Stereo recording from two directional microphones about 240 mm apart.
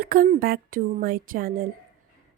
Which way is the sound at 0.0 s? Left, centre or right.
Right.